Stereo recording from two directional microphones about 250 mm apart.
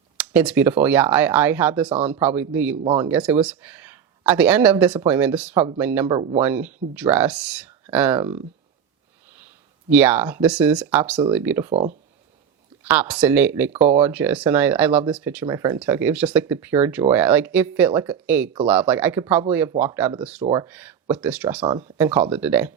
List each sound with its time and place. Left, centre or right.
0.2 s speech: centre
6.1 s speech: right
6.4 s speech: centre
9.9 s speech: centre
11.7 s speech: right
12.8 s speech: centre